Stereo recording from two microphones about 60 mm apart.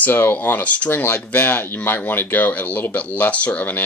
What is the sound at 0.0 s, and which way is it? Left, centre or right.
Speech, left.